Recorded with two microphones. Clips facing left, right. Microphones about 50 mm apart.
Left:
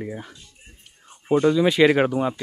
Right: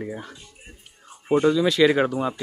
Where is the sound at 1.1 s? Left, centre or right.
Centre.